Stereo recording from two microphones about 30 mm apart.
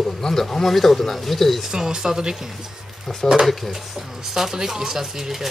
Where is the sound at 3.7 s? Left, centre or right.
Centre.